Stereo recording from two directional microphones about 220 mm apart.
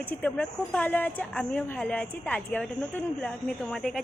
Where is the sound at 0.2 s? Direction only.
5° left (ahead or behind).